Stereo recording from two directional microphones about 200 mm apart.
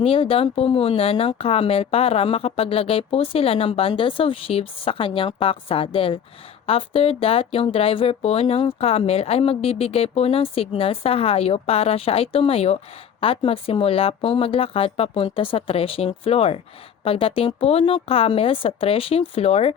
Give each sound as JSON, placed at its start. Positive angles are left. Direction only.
{"t": 0.0, "sound": "speech", "side_deg": 30}